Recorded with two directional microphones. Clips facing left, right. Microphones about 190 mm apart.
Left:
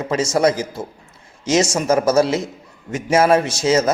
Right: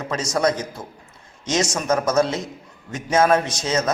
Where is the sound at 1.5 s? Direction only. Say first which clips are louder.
Left 5 dB; 30° left (ahead or behind).